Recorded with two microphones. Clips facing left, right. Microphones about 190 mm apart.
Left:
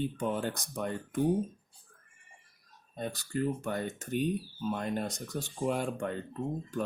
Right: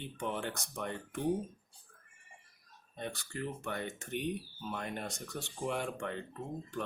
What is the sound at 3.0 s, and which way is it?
Speech, 35° left (ahead or behind).